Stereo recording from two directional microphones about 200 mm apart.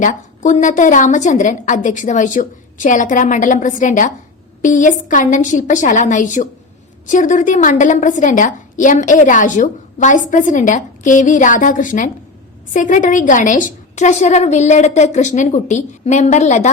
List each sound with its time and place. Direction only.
0.0 s a woman's voice: 40° left (ahead or behind)